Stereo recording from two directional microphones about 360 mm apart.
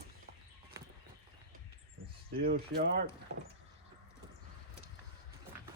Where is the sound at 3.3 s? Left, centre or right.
Right.